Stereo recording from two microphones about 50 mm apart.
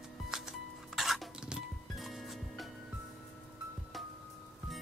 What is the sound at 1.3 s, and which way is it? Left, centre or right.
Music, centre.